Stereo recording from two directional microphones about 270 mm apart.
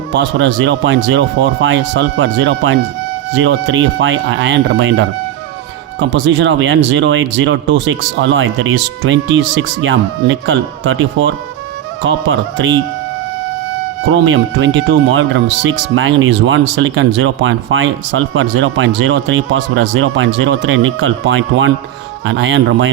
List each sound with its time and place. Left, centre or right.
0.1 s speech: right
14.0 s speech: right